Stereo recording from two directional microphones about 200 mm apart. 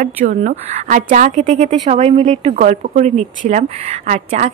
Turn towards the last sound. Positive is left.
turn(degrees=-35)  # may be behind; listen again after turning